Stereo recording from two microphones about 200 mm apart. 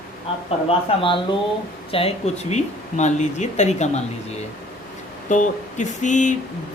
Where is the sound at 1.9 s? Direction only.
30° left (ahead or behind).